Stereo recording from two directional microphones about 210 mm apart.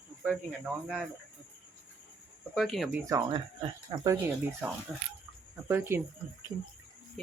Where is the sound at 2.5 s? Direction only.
Centre (ahead or behind).